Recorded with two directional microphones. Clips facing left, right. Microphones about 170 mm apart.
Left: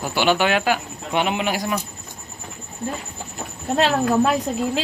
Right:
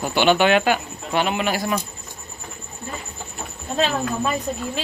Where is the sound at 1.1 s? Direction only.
20° left (ahead or behind).